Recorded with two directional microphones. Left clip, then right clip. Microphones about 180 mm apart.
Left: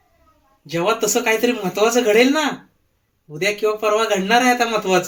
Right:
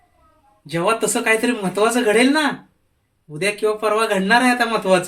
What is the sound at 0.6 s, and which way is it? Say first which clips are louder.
Speech: even; 20° right (ahead or behind).